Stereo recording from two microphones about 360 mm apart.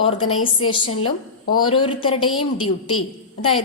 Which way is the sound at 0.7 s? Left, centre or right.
Centre.